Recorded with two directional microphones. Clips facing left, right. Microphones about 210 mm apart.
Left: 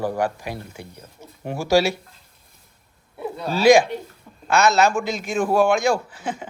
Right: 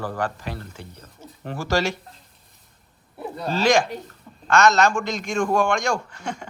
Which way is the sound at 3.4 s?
10° left (ahead or behind).